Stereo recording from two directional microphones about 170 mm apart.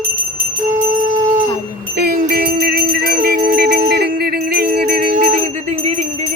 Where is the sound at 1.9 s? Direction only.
65° right (ahead or behind); by 6.0 s 45° right (ahead or behind).